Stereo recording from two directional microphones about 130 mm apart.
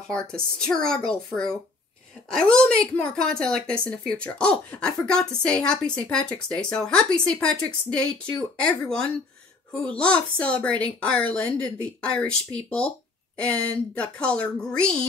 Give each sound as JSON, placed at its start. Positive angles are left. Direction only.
{"t": 0.1, "sound": "a woman's voice", "side_deg": 5}